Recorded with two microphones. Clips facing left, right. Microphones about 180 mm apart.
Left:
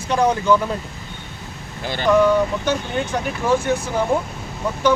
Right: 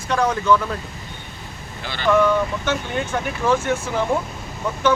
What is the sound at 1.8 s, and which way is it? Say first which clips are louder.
Speech: left 4 dB; 45° left (ahead or behind).